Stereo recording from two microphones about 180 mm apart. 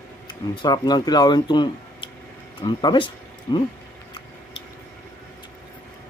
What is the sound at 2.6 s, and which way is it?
Speech, 25° left (ahead or behind).